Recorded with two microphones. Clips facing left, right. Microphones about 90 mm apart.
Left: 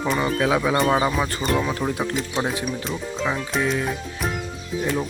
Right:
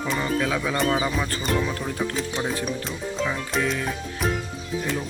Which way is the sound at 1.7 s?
20° left (ahead or behind).